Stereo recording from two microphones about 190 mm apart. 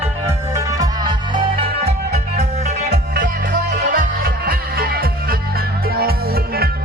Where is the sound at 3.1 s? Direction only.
65° right (ahead or behind).